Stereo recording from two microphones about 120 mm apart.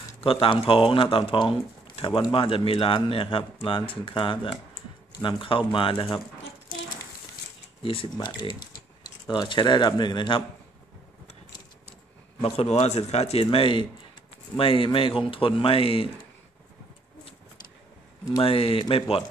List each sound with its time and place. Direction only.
0.2 s speech: 50° left (ahead or behind)
5.7 s speech: 45° left (ahead or behind)
7.8 s speech: 50° left (ahead or behind)
8.1 s speech: 35° left (ahead or behind)
12.4 s speech: 55° left (ahead or behind)
18.4 s speech: 50° left (ahead or behind)